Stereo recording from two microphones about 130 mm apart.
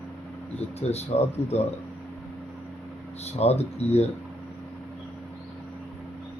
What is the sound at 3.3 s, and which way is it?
Speech, 55° left (ahead or behind).